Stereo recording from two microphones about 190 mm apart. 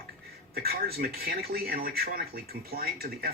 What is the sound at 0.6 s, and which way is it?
Speech, 55° right (ahead or behind).